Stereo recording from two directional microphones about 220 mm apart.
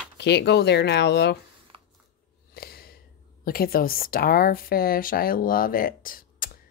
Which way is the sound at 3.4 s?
40° left (ahead or behind).